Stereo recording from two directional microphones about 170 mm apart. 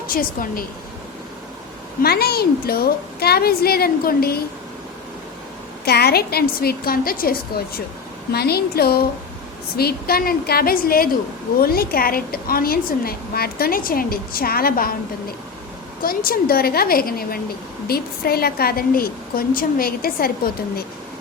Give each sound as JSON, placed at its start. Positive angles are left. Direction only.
{"t": 0.1, "sound": "a woman's voice", "side_deg": 55}
{"t": 2.0, "sound": "a woman's voice", "side_deg": 65}
{"t": 5.8, "sound": "a woman's voice", "side_deg": 70}
{"t": 16.0, "sound": "a woman's voice", "side_deg": 60}